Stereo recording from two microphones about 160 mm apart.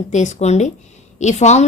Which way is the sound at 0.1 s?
50° left (ahead or behind).